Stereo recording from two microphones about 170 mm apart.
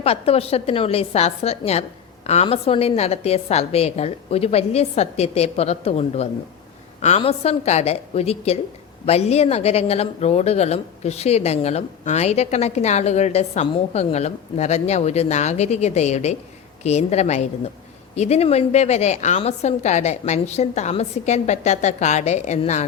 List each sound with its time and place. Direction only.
0.0 s speech: 35° left (ahead or behind)